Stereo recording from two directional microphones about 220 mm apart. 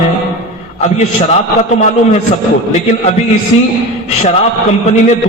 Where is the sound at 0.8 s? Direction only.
30° left (ahead or behind).